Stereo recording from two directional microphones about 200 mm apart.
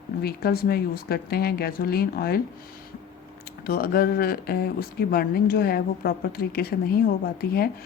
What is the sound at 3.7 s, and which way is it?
Speech, 50° left (ahead or behind).